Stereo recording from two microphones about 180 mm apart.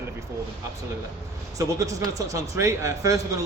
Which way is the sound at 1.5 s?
20° right (ahead or behind).